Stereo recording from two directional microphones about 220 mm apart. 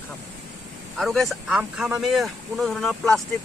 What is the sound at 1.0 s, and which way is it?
Speech, centre (ahead or behind).